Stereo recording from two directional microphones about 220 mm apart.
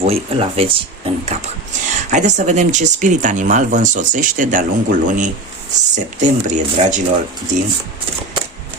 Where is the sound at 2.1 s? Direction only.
35° right (ahead or behind).